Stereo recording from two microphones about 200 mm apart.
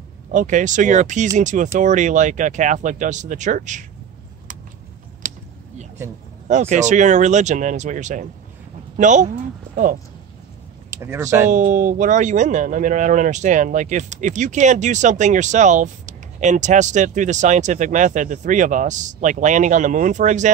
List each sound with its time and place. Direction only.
0.3 s speech: 40° right (ahead or behind)
5.2 s a sound: 40° right (ahead or behind)
6.4 s speech: 35° right (ahead or behind)
10.9 s speech: 15° right (ahead or behind)
11.5 s speech: 40° right (ahead or behind)